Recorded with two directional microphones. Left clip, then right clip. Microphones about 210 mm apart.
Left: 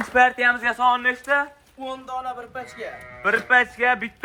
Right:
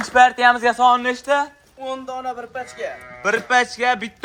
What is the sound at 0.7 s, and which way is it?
Speech, 25° right (ahead or behind).